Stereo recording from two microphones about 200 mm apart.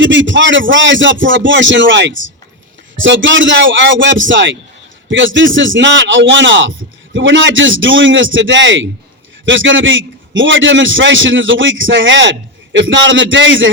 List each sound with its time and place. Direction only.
0.0 s a man's voice: 70° right (ahead or behind)